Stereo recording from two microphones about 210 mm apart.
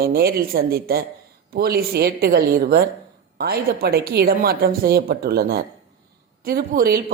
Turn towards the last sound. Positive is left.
turn(degrees=-45)  # may be behind; listen again after turning